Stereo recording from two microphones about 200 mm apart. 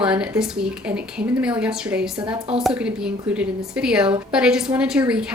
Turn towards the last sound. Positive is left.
turn(degrees=-5)  # may be behind; listen again after turning